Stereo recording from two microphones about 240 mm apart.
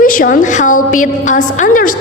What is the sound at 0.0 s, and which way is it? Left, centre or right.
A woman's voice, left.